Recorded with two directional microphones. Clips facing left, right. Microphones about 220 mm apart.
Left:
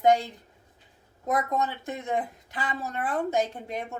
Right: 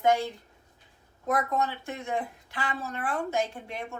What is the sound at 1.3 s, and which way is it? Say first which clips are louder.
A woman's voice: left 1 dB; 20° left (ahead or behind).